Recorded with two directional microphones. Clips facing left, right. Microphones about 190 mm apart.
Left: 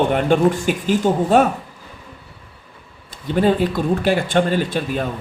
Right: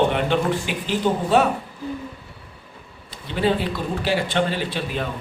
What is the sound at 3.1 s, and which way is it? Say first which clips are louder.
Speech: left 5 dB; 45° left (ahead or behind).